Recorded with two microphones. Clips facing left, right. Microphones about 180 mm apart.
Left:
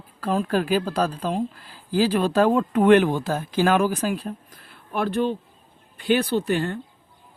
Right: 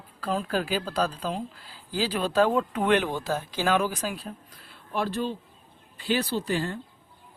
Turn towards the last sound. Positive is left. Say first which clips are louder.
# left 5 dB
turn(degrees=60)  # may be behind; listen again after turning